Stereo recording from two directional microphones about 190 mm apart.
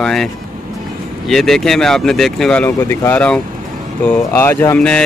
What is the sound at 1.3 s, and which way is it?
Speech, centre (ahead or behind).